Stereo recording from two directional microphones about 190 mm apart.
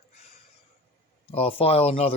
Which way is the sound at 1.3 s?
30° left (ahead or behind).